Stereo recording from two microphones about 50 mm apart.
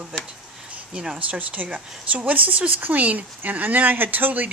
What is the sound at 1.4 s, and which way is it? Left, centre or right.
Speech, right.